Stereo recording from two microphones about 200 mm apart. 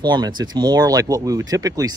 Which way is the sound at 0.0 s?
20° right (ahead or behind).